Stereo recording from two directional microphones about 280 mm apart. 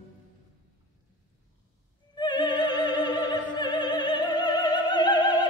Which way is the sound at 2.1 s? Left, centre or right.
Centre.